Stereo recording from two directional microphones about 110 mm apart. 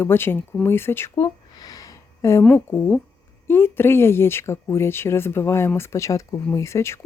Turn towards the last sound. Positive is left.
turn(degrees=25)  # may be behind; listen again after turning